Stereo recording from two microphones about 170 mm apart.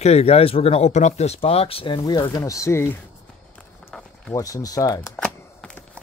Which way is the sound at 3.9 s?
5° left (ahead or behind).